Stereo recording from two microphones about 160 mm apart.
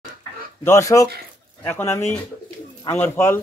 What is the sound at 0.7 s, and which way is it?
A man's voice, 20° left (ahead or behind).